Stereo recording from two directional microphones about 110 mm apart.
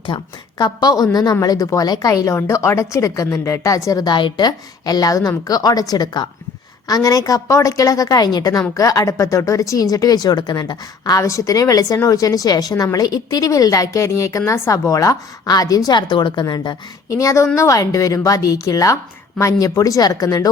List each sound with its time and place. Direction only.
0.1 s a woman's voice: 55° left (ahead or behind)
0.6 s a woman's voice: 35° left (ahead or behind)